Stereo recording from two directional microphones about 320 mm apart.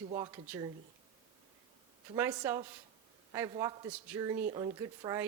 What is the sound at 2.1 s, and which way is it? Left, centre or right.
Speech, centre.